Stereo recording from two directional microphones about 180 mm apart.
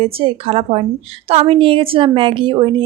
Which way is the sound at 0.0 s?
30° right (ahead or behind).